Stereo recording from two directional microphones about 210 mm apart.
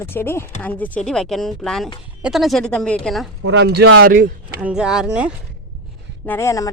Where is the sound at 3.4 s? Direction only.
60° right (ahead or behind).